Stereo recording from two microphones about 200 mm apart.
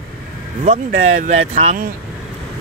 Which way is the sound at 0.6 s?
35° right (ahead or behind).